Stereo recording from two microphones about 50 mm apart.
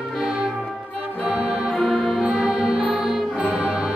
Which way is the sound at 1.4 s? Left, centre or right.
Centre.